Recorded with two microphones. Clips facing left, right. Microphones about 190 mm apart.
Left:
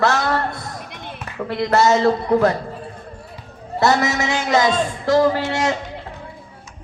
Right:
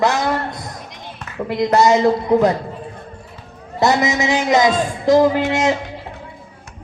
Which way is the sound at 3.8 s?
15° right (ahead or behind).